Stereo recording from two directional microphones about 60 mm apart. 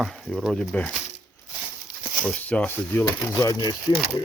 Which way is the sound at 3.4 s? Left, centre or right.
Left.